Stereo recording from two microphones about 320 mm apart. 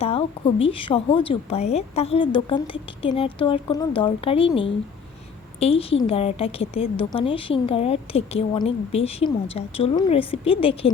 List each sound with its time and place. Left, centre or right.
0.0 s a woman's voice: centre